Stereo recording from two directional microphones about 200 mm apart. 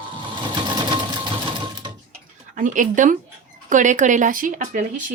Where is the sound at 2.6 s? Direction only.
40° right (ahead or behind).